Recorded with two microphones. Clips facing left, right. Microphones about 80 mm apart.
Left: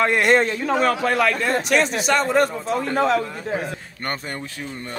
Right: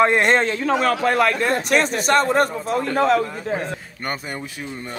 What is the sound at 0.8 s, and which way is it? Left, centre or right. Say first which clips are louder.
A man's voice: right 1 dB; right.